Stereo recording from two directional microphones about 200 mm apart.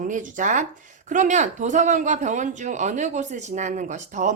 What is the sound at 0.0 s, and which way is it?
Speech, 40° right (ahead or behind).